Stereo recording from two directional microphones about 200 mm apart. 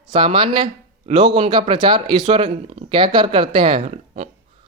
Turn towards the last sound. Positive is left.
turn(degrees=-35)  # may be behind; listen again after turning